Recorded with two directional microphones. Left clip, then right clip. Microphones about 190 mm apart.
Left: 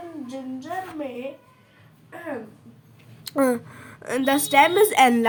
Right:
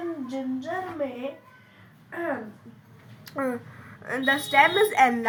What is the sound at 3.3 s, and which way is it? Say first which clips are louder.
A woman's voice: left 8 dB; 50° left (ahead or behind).